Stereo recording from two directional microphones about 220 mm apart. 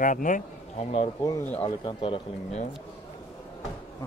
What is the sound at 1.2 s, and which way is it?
Speech, 15° left (ahead or behind).